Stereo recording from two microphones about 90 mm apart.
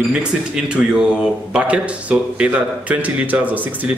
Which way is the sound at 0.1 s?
10° right (ahead or behind).